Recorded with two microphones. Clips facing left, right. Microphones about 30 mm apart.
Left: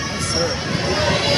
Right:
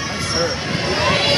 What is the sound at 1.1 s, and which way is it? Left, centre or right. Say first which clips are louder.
Run: right 3 dB; right.